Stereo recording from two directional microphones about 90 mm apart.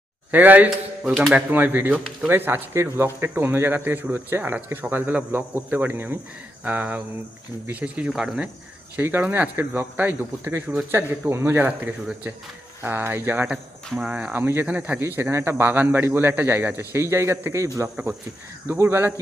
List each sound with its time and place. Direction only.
0.3 s a man's voice: 20° right (ahead or behind)
9.0 s speech: 25° right (ahead or behind)
13.5 s speech: 10° right (ahead or behind)
14.4 s speech: 25° right (ahead or behind)
15.0 s speech: 30° right (ahead or behind)